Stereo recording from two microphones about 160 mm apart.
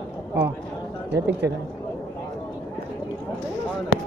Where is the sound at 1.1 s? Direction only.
90° right.